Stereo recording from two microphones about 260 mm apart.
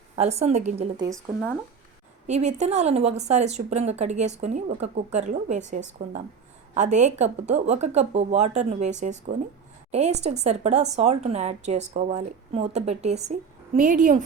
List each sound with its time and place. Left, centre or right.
0.2 s speech: right
1.1 s speech: centre
2.2 s speech: right